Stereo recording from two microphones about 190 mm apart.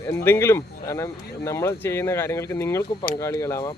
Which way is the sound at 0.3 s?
15° left (ahead or behind).